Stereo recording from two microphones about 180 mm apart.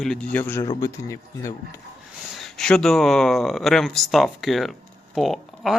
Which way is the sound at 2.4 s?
5° left (ahead or behind).